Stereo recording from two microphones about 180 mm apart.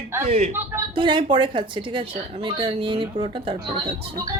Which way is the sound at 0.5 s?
15° right (ahead or behind).